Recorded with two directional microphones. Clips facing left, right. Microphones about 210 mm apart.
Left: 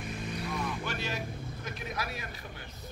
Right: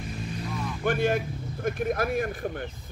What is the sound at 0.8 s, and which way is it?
A man's voice, 50° right (ahead or behind).